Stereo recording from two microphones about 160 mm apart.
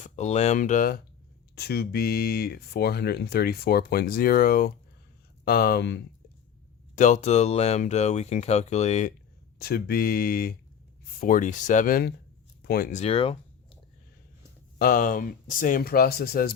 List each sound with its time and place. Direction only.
0.0 s speech: 45° left (ahead or behind)
1.5 s speech: 90° left
6.9 s speech: 50° left (ahead or behind)
9.6 s speech: 75° left (ahead or behind)
11.2 s speech: 55° left (ahead or behind)
12.6 s speech: 75° left (ahead or behind)
12.9 s speech: 40° left (ahead or behind)
14.8 s speech: 60° left (ahead or behind)